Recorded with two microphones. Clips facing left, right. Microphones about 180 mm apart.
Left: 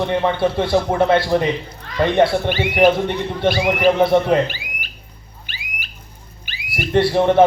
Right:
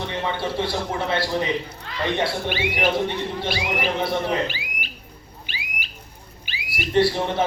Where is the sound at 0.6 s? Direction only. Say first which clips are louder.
Left 9 dB; 55° left (ahead or behind).